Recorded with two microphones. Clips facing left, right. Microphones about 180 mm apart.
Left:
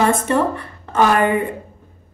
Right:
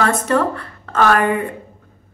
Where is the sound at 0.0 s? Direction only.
15° left (ahead or behind).